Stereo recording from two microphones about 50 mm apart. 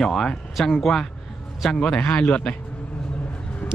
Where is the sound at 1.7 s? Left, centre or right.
Centre.